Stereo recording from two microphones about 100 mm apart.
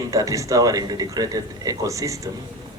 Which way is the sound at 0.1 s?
35° right (ahead or behind).